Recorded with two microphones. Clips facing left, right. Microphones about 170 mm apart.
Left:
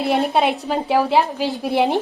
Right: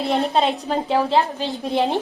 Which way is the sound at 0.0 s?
5° left (ahead or behind).